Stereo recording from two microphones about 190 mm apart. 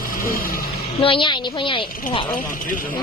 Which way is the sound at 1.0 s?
25° left (ahead or behind).